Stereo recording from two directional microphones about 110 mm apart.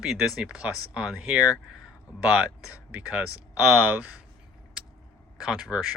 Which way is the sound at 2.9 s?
10° right (ahead or behind).